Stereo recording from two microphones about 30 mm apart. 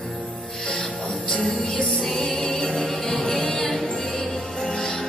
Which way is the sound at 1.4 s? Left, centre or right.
Centre.